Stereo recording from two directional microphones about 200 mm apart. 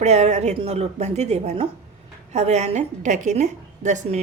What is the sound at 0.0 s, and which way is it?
A woman's voice, 35° right (ahead or behind).